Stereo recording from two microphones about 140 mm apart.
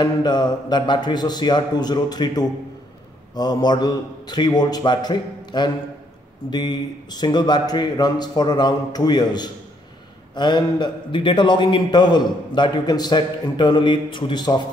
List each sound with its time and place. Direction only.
0.0 s a man's voice: 30° left (ahead or behind)